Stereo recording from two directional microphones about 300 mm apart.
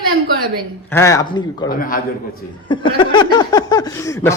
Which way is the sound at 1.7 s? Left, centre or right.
Left.